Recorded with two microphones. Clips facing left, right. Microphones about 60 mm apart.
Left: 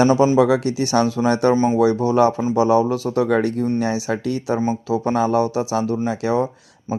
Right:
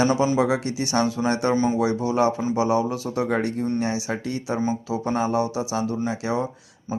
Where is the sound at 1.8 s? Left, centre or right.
Left.